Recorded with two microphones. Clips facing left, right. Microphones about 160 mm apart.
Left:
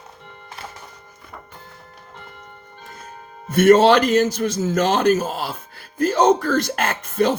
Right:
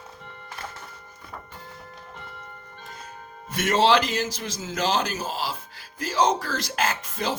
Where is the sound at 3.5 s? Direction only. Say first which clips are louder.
Left 8 dB; 50° left (ahead or behind).